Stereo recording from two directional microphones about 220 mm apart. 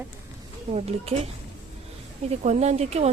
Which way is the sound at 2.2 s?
30° right (ahead or behind).